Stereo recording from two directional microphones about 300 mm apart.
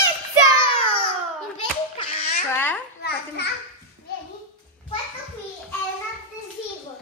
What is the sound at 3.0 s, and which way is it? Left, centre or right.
Speech, left.